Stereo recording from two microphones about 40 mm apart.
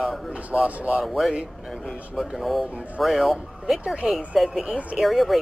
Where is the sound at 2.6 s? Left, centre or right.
Right.